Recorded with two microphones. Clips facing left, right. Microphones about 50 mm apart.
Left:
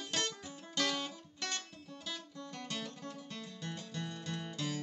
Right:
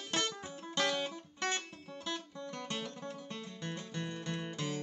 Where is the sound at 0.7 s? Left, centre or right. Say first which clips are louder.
Right 2 dB; right.